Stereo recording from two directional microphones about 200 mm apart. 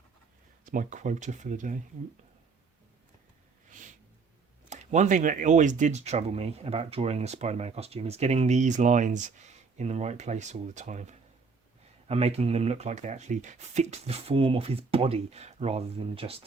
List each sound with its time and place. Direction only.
0.6 s speech: 40° right (ahead or behind)
3.7 s a sound: 40° right (ahead or behind)
4.7 s speech: 35° right (ahead or behind)